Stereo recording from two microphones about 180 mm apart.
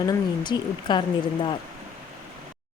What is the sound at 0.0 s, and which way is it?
A woman's voice, 20° left (ahead or behind).